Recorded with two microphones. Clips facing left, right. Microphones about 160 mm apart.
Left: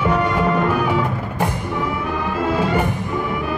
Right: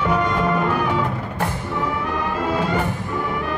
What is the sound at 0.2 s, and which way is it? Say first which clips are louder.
Music: left 2 dB; 10° left (ahead or behind).